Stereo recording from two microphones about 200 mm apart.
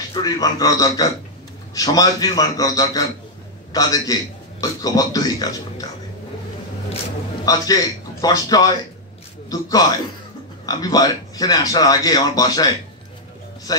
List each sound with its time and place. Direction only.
0.1 s a man's voice: 20° left (ahead or behind)
7.4 s a man's voice: 20° left (ahead or behind)